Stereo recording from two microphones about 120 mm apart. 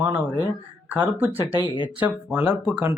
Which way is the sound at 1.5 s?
40° left (ahead or behind).